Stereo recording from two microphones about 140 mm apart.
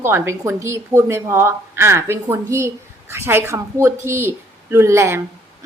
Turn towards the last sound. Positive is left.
turn(degrees=-20)  # may be behind; listen again after turning